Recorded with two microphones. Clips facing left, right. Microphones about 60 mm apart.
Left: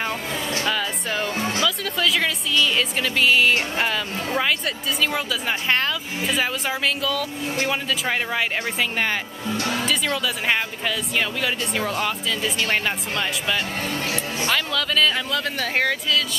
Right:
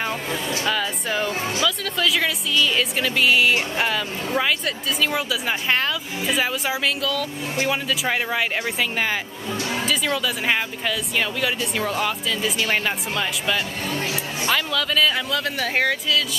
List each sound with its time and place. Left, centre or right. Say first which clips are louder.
0.7 s speech: right 3 dB; centre